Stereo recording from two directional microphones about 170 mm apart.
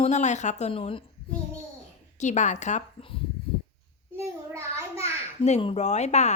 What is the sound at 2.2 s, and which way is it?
Speech, 45° left (ahead or behind).